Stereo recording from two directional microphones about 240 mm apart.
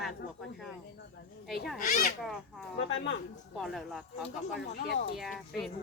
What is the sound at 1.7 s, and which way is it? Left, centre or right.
Speech, left.